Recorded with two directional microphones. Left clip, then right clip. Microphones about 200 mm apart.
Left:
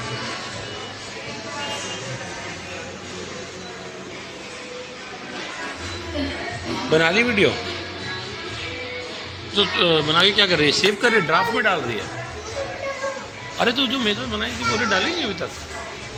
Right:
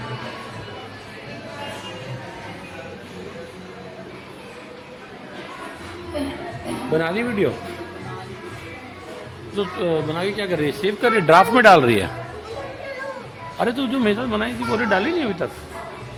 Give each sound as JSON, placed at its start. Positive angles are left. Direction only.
{"t": 6.9, "sound": "speech", "side_deg": -5}
{"t": 9.6, "sound": "speech", "side_deg": -5}
{"t": 11.3, "sound": "speech", "side_deg": -55}
{"t": 13.6, "sound": "speech", "side_deg": -20}